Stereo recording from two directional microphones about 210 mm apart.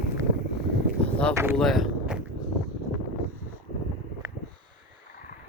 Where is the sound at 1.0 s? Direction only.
5° left (ahead or behind).